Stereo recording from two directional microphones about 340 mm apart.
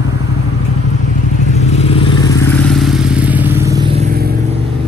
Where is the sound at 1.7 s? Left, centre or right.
Centre.